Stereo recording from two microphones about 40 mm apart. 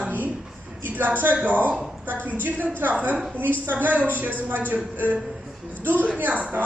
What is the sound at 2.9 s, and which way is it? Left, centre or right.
Speech, right.